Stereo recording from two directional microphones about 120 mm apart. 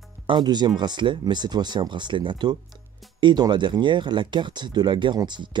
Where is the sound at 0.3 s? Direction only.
35° right (ahead or behind).